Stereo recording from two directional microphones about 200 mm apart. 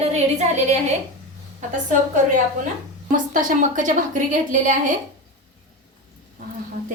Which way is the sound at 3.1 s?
40° right (ahead or behind).